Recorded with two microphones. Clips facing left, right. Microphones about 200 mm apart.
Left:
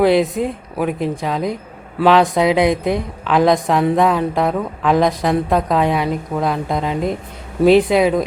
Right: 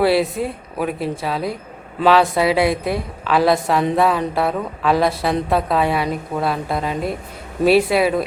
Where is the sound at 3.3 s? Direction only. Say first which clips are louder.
Left 2 dB; 5° right (ahead or behind).